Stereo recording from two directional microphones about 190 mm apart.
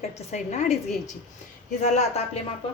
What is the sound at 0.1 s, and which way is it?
A woman's voice, 35° left (ahead or behind).